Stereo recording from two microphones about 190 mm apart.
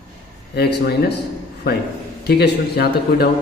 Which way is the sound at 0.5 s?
55° left (ahead or behind).